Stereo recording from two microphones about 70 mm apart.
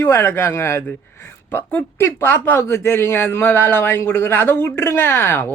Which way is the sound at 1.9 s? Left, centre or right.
Left.